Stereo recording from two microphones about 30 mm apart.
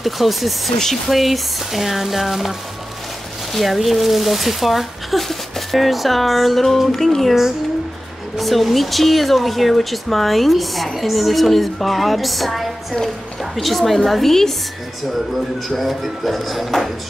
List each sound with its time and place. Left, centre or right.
0.0 s speech: centre
0.7 s speech: centre
1.1 s speech: centre
3.5 s speech: centre
8.4 s speech: centre
15.8 s speech: centre